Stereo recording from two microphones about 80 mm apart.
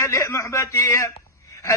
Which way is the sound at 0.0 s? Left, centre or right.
Left.